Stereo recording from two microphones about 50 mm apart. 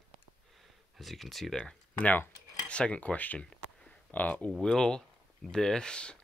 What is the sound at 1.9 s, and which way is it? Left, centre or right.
Speech, left.